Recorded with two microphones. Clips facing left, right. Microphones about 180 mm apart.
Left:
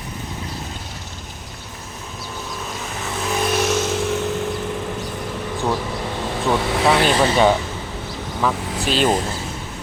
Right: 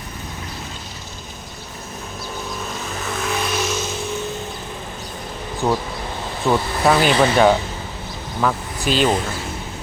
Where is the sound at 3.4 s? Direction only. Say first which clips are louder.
Left 4 dB; 65° left (ahead or behind); by 4.2 s 90° left.